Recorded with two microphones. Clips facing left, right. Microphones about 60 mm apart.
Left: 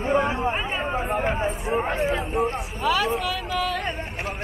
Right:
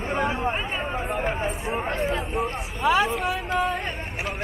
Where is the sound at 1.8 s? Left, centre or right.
Centre.